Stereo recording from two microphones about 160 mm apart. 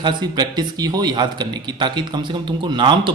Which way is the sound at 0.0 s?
30° right (ahead or behind).